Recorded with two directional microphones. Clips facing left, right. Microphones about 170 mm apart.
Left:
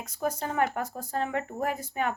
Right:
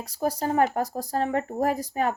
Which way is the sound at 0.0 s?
35° right (ahead or behind).